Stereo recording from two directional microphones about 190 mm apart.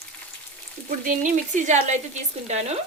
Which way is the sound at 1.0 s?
45° right (ahead or behind).